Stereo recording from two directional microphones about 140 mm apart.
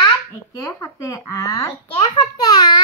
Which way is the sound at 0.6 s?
20° left (ahead or behind).